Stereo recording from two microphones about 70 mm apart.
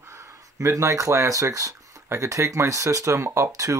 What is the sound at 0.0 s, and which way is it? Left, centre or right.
Speech, right.